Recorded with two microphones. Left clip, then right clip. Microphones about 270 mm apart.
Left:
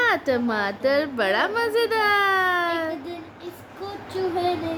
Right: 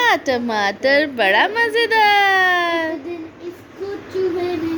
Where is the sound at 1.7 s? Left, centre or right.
Left.